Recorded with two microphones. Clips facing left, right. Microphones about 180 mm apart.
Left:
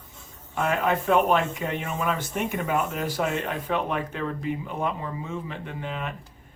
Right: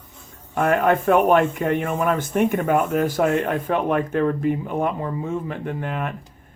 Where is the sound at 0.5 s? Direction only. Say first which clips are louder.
Right 6 dB; 55° right (ahead or behind).